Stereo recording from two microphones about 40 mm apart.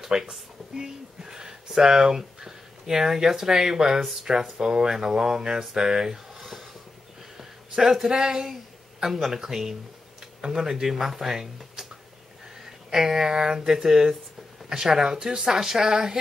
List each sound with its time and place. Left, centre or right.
0.0 s speech: centre
6.3 s a sound: centre
8.1 s speech: centre
9.0 s speech: centre